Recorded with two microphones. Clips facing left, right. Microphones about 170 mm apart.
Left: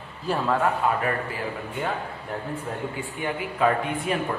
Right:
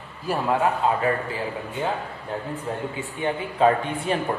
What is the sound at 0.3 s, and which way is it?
Speech, 15° right (ahead or behind).